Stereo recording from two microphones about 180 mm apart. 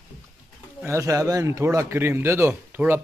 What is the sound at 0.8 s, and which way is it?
A man's voice, 15° right (ahead or behind).